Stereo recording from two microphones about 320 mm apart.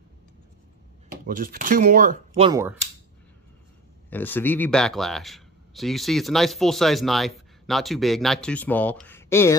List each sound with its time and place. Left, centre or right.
1.2 s speech: right; by 2.8 s centre
4.1 s speech: centre